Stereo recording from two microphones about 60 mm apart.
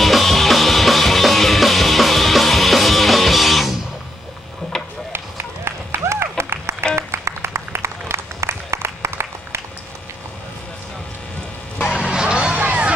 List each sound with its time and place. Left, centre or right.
0.0 s music: centre
5.1 s run: right
7.0 s a sound: right
12.0 s music: centre